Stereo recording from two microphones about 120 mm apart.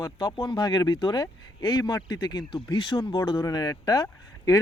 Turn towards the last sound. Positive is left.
turn(degrees=30)  # may be behind; listen again after turning